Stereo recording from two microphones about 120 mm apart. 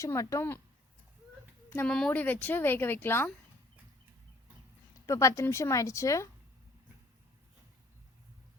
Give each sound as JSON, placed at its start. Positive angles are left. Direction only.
{"t": 0.0, "sound": "speech", "side_deg": 25}
{"t": 1.9, "sound": "speech", "side_deg": 10}
{"t": 5.0, "sound": "speech", "side_deg": 25}